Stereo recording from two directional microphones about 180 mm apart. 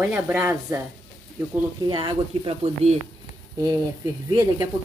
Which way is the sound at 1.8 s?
25° right (ahead or behind).